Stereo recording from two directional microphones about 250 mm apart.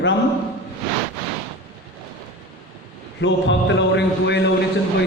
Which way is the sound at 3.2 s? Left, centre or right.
Left.